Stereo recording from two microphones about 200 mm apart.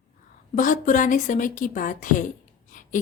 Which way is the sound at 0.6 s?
40° left (ahead or behind).